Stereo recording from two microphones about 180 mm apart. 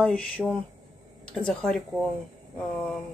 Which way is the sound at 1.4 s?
5° left (ahead or behind).